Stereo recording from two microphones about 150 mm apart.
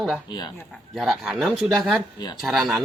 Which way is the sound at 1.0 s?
5° right (ahead or behind).